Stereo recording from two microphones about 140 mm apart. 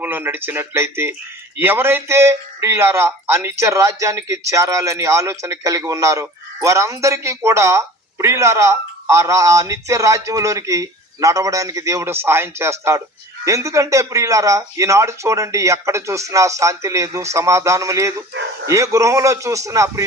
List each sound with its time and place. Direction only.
0.0 s speech: 15° right (ahead or behind)